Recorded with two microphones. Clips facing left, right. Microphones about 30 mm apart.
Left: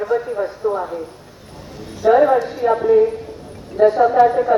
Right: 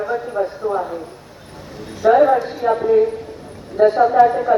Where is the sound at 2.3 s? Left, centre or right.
Right.